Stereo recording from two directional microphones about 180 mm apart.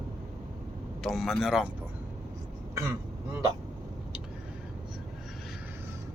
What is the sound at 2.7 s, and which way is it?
Speech, 15° right (ahead or behind).